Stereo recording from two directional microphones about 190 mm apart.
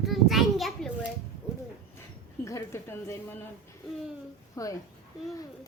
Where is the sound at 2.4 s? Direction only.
15° left (ahead or behind).